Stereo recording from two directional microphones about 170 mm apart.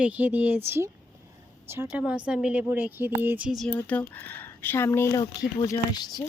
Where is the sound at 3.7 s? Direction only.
10° left (ahead or behind); by 6.3 s 25° left (ahead or behind).